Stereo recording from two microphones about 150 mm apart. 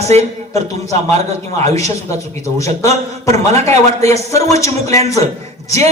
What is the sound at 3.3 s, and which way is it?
Speech, 45° right (ahead or behind).